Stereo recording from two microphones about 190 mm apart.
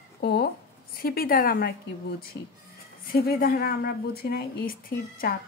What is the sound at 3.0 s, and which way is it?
A woman's voice, 50° left (ahead or behind).